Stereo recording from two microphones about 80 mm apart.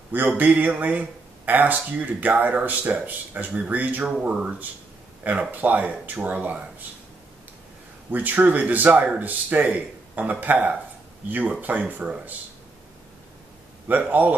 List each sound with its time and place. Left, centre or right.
0.1 s speech: right
8.1 s speech: right
13.8 s speech: right